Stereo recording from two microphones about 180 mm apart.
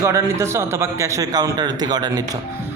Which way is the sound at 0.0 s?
15° right (ahead or behind).